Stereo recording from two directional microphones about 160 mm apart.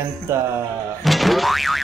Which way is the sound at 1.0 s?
Centre (ahead or behind).